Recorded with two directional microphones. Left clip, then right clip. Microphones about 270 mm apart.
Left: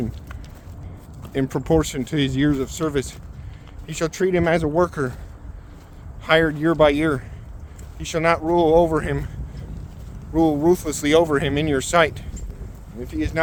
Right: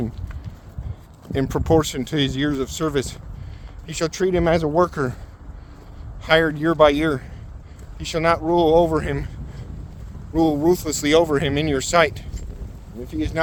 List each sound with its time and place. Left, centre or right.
1.3 s speech: right
6.2 s speech: right
10.3 s speech: right